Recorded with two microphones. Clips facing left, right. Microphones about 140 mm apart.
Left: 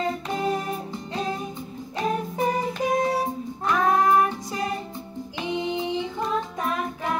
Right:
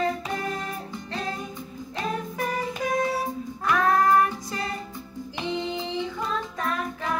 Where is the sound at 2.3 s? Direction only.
25° left (ahead or behind).